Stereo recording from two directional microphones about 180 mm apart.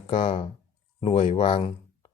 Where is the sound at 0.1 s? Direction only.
30° left (ahead or behind).